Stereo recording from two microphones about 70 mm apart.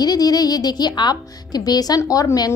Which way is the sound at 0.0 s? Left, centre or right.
Left.